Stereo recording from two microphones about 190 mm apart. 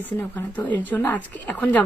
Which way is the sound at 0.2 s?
10° left (ahead or behind).